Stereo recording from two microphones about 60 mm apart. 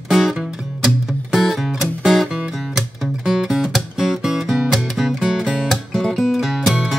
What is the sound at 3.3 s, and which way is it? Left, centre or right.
Music, centre.